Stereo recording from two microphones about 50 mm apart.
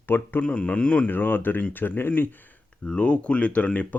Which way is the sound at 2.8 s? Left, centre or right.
Left.